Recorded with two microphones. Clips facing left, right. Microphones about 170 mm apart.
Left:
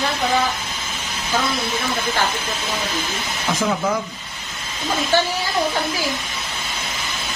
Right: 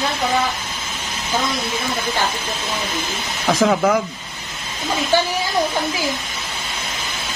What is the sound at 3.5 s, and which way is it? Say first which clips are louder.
Speech: right 5 dB; 75° right (ahead or behind).